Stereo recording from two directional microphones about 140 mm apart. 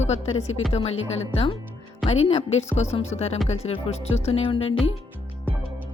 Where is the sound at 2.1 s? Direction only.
50° left (ahead or behind).